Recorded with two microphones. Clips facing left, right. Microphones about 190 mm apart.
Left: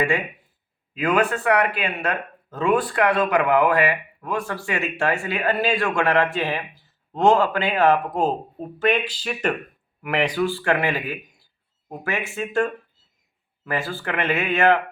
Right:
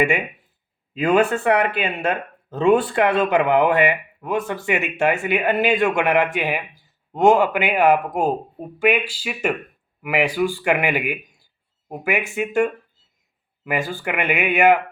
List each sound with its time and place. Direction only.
0.0 s a man's voice: 20° right (ahead or behind)